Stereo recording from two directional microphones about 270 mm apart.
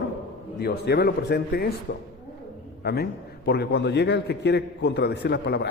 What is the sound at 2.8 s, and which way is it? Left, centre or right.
A man's voice, left.